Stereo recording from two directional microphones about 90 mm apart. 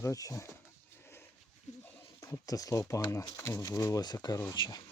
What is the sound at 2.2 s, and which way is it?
Speech, 40° left (ahead or behind).